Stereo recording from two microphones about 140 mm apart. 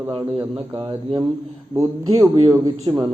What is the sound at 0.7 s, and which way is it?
A man's voice, 30° right (ahead or behind).